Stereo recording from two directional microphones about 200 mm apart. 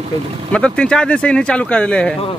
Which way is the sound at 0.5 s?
5° left (ahead or behind).